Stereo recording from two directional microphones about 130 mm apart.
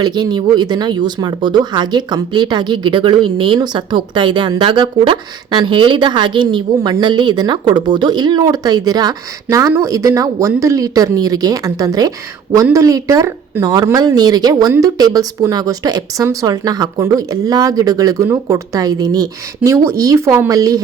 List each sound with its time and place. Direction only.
0.0 s speech: 35° right (ahead or behind)